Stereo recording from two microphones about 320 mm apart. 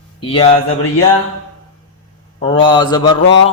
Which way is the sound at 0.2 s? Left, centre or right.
Centre.